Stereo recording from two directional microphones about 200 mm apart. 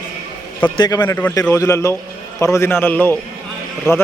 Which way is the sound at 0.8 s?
15° left (ahead or behind).